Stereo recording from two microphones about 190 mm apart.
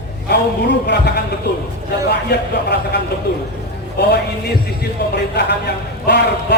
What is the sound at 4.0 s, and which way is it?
Speech, 60° left (ahead or behind).